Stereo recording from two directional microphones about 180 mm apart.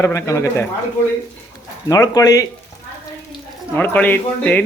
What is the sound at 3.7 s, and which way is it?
Speech, 10° left (ahead or behind).